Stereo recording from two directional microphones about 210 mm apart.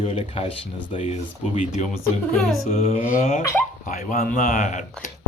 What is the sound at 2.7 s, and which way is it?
Speech, 30° left (ahead or behind).